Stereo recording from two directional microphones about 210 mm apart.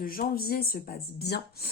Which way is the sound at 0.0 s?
45° left (ahead or behind).